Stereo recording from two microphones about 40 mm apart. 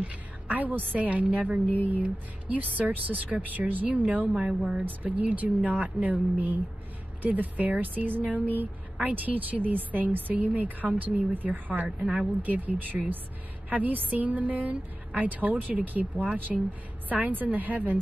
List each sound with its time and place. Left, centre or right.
0.0 s a woman's voice: right
4.5 s speech: centre
5.0 s speech: right